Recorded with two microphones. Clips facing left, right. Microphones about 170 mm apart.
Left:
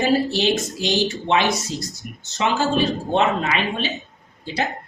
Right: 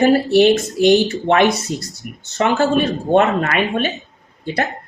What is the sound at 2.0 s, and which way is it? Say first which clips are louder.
Speech: right 4 dB; 5° right (ahead or behind).